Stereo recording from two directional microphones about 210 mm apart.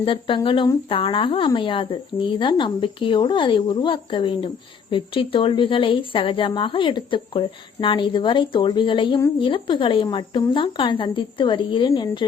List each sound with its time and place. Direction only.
0.0 s a woman's voice: 25° left (ahead or behind)